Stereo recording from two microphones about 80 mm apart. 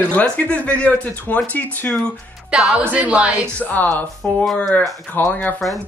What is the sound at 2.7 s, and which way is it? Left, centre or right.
Speech, centre.